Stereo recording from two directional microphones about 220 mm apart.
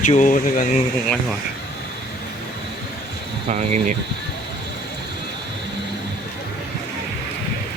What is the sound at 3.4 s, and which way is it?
Speech, 30° right (ahead or behind).